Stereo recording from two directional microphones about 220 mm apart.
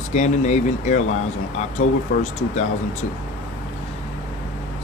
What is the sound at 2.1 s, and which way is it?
Speech, 40° left (ahead or behind).